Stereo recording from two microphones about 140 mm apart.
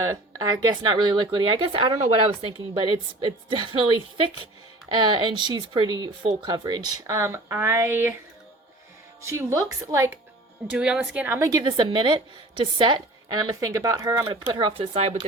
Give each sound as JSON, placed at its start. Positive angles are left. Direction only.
{"t": 0.0, "sound": "speech", "side_deg": -25}
{"t": 4.9, "sound": "a woman's voice", "side_deg": -30}
{"t": 9.2, "sound": "a woman's voice", "side_deg": -20}
{"t": 10.7, "sound": "a woman's voice", "side_deg": -5}
{"t": 14.5, "sound": "speech", "side_deg": -40}